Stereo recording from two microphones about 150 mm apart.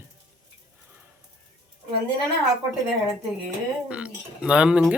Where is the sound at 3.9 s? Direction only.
5° right (ahead or behind).